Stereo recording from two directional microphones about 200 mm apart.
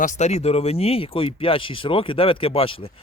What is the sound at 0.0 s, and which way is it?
Speech, 35° left (ahead or behind).